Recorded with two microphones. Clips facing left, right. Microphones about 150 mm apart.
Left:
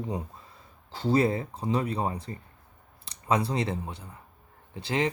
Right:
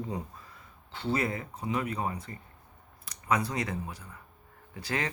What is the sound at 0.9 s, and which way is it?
Speech, 35° left (ahead or behind).